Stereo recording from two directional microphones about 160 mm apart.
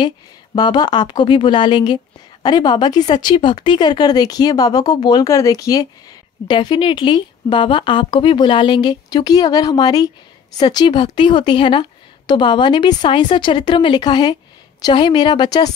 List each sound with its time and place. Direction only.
0.6 s speech: 25° left (ahead or behind)